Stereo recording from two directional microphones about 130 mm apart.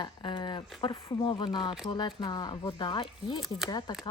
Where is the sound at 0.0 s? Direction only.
35° left (ahead or behind).